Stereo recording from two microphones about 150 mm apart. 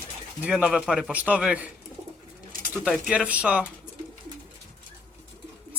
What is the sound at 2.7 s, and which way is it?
Speech, centre (ahead or behind).